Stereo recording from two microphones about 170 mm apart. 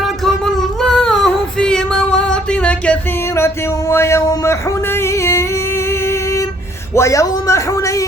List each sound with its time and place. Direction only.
0.8 s female singing: 5° left (ahead or behind)
6.9 s speech: 20° left (ahead or behind)